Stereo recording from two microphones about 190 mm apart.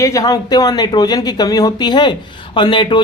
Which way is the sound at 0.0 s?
20° left (ahead or behind).